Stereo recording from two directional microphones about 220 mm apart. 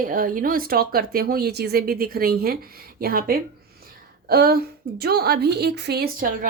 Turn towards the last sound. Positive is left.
turn(degrees=-40)  # may be behind; listen again after turning